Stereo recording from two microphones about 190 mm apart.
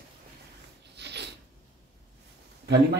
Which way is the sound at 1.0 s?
60° right (ahead or behind).